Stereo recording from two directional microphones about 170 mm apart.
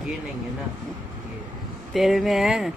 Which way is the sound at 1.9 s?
Centre (ahead or behind).